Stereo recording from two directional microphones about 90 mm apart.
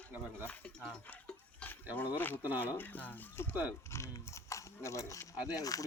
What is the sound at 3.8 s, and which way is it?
Speech, 30° left (ahead or behind).